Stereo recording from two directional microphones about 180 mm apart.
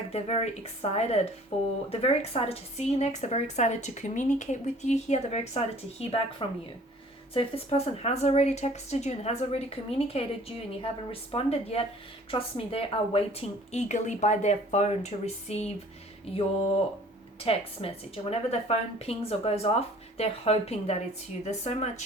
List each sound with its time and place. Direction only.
0.1 s a woman's voice: 35° left (ahead or behind)
17.4 s a woman's voice: 30° left (ahead or behind)